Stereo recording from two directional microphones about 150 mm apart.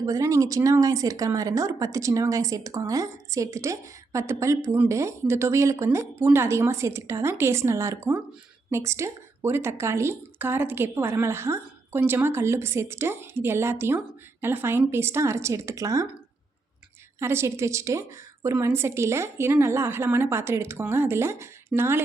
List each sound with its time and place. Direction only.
0.0 s a woman's voice: 20° right (ahead or behind)
17.2 s a woman's voice: 15° right (ahead or behind)